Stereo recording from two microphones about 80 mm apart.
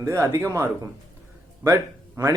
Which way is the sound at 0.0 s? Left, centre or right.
Right.